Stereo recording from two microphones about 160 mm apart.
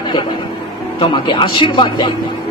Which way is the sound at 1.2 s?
30° left (ahead or behind).